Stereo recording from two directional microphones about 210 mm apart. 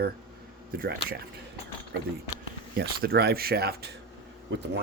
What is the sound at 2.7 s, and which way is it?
Speech, 50° right (ahead or behind).